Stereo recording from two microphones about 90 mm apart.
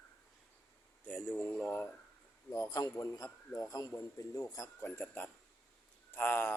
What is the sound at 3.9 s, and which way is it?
Speech, 30° left (ahead or behind).